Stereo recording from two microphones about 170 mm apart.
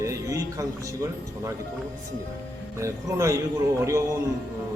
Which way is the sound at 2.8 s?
15° right (ahead or behind).